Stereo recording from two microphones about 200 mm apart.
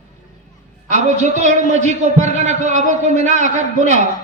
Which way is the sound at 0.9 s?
35° right (ahead or behind).